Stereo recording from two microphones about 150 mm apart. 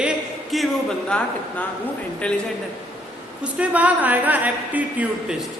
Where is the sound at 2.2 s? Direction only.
5° left (ahead or behind).